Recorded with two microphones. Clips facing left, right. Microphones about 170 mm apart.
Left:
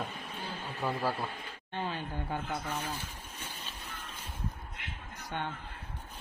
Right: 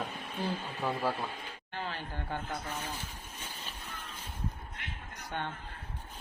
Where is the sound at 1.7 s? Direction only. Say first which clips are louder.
Left 3 dB; 15° left (ahead or behind).